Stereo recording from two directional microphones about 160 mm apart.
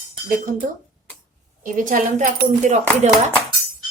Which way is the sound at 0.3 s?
55° right (ahead or behind).